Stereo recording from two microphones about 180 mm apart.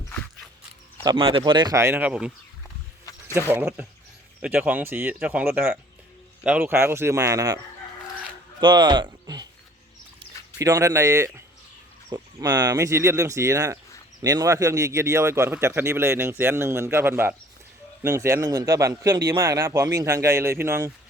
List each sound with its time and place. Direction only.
1.0 s speech: 30° right (ahead or behind); by 2.3 s 5° right (ahead or behind)
3.5 s a man's voice: 10° right (ahead or behind)
8.6 s a man's voice: 25° right (ahead or behind)